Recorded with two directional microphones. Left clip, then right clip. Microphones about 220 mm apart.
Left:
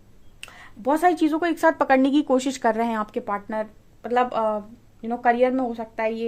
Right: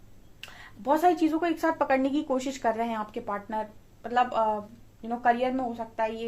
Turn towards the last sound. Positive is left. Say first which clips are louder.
# left 4 dB
turn(degrees=45)  # may be behind; listen again after turning